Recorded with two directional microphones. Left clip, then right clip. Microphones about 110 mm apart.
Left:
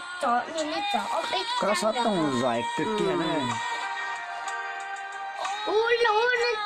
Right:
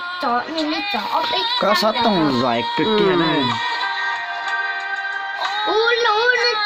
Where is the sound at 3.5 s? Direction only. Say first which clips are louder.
Right 9 dB; 35° left (ahead or behind).